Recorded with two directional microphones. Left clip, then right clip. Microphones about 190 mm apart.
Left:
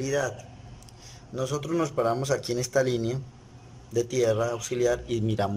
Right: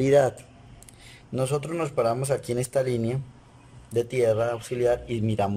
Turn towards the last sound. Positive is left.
turn(degrees=-5)  # may be behind; listen again after turning